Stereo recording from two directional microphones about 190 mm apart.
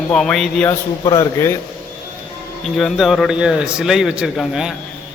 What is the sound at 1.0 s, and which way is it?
Speech, 20° left (ahead or behind).